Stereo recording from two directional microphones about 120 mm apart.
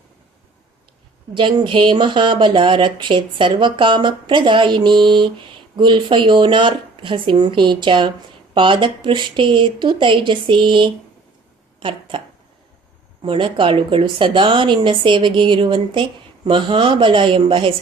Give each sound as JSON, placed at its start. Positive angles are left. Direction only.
{"t": 1.3, "sound": "speech", "side_deg": -40}
{"t": 13.2, "sound": "speech", "side_deg": -45}